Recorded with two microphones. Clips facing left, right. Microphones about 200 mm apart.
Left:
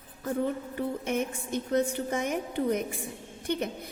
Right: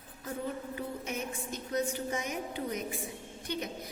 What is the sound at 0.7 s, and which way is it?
A woman's voice, 55° left (ahead or behind).